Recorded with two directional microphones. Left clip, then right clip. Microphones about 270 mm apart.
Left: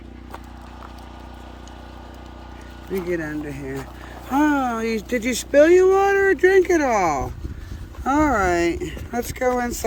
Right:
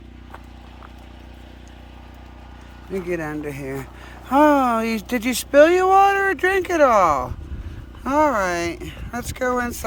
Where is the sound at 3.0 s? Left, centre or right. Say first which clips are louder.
Right 2 dB; centre.